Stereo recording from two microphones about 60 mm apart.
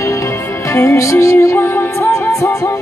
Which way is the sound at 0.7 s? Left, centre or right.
Left.